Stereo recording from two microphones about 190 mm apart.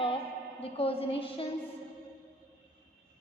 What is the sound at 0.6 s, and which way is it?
Speech, 30° left (ahead or behind).